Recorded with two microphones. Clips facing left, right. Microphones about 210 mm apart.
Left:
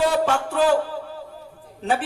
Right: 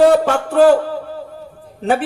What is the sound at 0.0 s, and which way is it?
Music, 60° right (ahead or behind).